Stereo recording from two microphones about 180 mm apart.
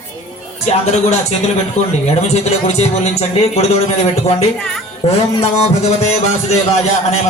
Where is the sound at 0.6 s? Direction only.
40° left (ahead or behind).